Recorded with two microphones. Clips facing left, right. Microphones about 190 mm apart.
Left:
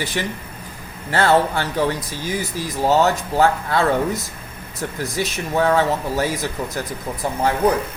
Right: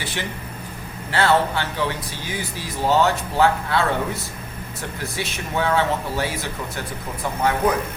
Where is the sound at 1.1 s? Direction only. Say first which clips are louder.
Left 2 dB; 45° left (ahead or behind).